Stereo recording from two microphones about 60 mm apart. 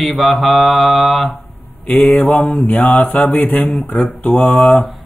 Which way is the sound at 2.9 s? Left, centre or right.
Left.